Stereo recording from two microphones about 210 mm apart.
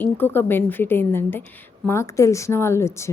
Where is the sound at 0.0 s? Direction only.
10° left (ahead or behind).